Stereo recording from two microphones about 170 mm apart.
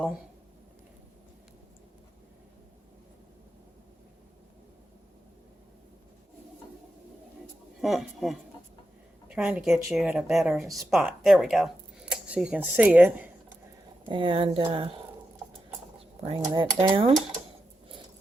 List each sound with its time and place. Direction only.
7.8 s speech: centre (ahead or behind)
14.1 s speech: 30° right (ahead or behind)
16.2 s speech: 25° right (ahead or behind)